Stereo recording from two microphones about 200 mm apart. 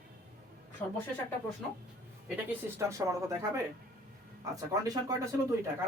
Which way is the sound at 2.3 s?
10° right (ahead or behind).